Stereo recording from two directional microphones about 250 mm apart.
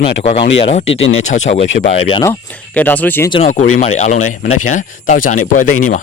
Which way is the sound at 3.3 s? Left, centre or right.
Left.